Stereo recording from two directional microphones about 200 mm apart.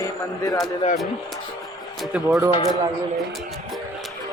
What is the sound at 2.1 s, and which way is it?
Speech, 5° right (ahead or behind).